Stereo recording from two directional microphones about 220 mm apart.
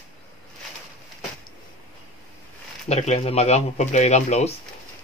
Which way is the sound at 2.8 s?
30° left (ahead or behind).